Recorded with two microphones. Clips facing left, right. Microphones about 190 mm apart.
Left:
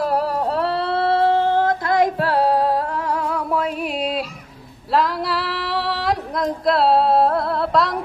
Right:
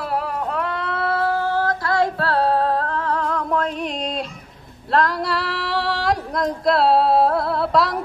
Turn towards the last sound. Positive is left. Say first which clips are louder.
# even
turn(degrees=0)  # may be behind; listen again after turning